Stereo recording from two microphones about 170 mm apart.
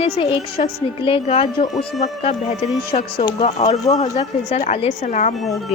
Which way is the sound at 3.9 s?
40° left (ahead or behind).